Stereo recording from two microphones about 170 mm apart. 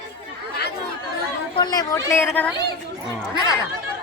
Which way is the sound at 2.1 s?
10° left (ahead or behind).